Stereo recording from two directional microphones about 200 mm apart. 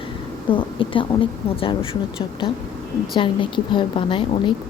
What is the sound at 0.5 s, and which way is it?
A woman's voice, 25° left (ahead or behind).